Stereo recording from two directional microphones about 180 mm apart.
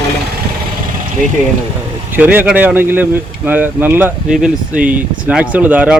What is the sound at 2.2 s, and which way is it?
Speech, 10° right (ahead or behind).